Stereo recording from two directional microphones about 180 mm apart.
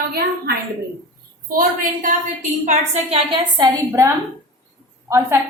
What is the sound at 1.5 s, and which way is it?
A woman's voice, 50° right (ahead or behind).